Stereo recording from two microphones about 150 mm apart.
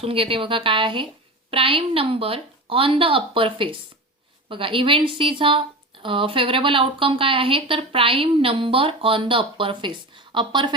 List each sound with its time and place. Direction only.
0.0 s speech: 40° right (ahead or behind)